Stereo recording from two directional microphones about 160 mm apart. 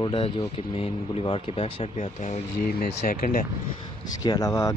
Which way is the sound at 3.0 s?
65° left (ahead or behind).